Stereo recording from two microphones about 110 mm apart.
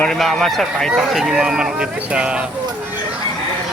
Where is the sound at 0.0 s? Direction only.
Centre (ahead or behind).